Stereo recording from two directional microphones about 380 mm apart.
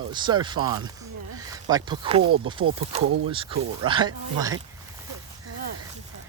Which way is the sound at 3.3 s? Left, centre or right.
Centre.